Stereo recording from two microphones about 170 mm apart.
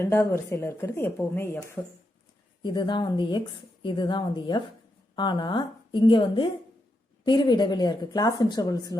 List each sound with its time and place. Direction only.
0.0 s a woman's voice: 15° left (ahead or behind)
2.6 s speech: 25° left (ahead or behind)